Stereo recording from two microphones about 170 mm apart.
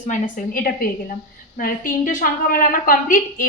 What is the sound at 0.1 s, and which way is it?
A woman's voice, 55° left (ahead or behind).